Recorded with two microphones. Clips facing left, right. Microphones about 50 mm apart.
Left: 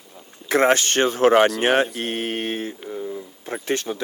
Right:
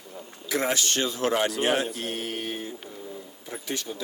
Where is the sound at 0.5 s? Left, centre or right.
Left.